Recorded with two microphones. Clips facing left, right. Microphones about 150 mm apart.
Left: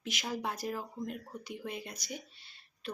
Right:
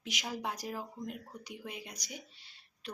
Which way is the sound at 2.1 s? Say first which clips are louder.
Left 3 dB; 15° right (ahead or behind).